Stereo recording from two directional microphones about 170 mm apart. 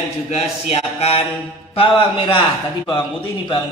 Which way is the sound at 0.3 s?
35° left (ahead or behind).